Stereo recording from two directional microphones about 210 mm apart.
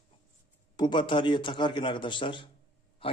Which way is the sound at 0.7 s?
20° left (ahead or behind).